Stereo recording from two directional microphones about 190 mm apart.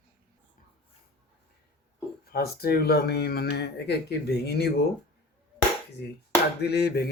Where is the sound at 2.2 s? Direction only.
55° left (ahead or behind).